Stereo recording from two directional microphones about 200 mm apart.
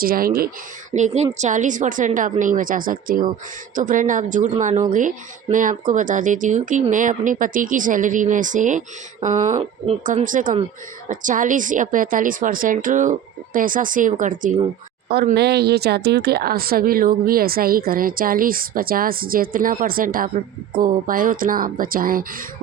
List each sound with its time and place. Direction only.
0.0 s speech: 45° right (ahead or behind)
9.8 s speech: 35° right (ahead or behind)